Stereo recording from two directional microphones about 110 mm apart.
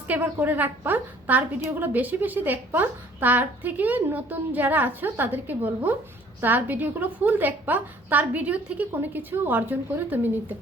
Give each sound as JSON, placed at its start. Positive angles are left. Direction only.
{"t": 0.1, "sound": "a woman's voice", "side_deg": -15}